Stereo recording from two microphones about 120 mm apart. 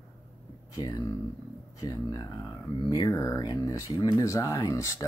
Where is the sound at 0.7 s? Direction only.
30° left (ahead or behind).